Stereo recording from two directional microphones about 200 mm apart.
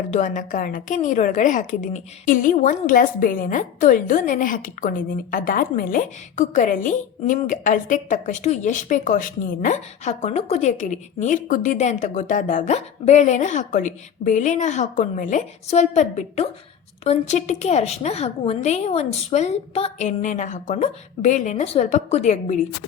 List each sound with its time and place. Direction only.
0.1 s a woman's voice: 40° left (ahead or behind)